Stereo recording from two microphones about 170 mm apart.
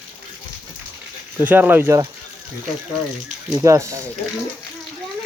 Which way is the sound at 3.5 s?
20° right (ahead or behind).